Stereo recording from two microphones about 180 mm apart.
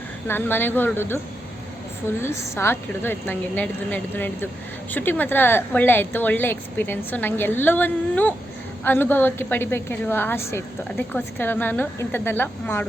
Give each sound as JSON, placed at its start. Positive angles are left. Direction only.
{"t": 0.3, "sound": "a woman's voice", "side_deg": 10}